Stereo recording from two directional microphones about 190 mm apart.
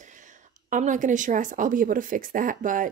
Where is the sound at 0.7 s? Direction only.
40° right (ahead or behind).